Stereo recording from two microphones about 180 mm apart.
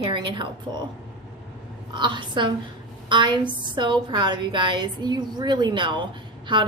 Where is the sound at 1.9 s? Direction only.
25° right (ahead or behind).